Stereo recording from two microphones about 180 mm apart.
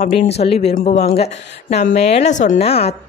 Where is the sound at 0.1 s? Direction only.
35° left (ahead or behind).